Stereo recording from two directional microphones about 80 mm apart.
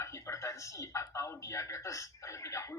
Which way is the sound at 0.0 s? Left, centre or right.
Left.